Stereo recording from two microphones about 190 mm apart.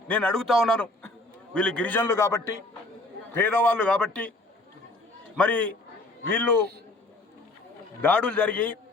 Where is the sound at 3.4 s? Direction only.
10° left (ahead or behind).